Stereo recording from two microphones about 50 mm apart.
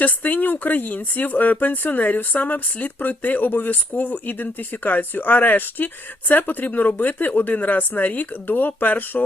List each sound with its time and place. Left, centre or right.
0.0 s speech: left